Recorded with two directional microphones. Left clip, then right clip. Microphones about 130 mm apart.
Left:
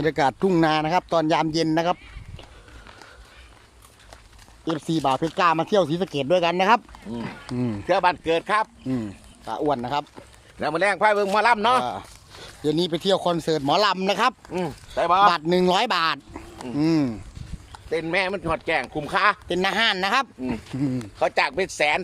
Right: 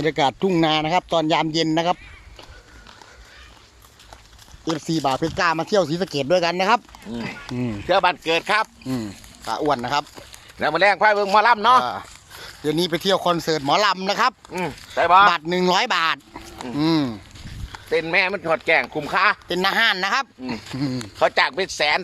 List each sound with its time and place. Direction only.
0.0 s a man's voice: 5° left (ahead or behind)
4.9 s a man's voice: 5° left (ahead or behind); by 14.3 s 20° left (ahead or behind)
14.5 s speech: 5° left (ahead or behind)
15.3 s a man's voice: 20° left (ahead or behind)